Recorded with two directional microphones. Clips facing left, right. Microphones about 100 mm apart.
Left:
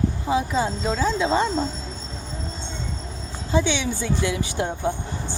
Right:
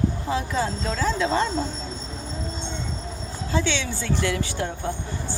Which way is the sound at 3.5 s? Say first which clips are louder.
Left 3 dB; 15° left (ahead or behind).